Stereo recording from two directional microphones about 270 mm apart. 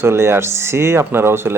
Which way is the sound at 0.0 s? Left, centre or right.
Centre.